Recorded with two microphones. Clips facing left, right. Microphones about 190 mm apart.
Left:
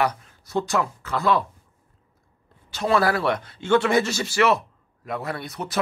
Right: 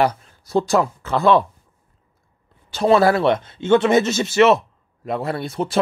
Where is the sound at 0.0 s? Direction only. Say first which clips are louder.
Right 5 dB; 30° right (ahead or behind).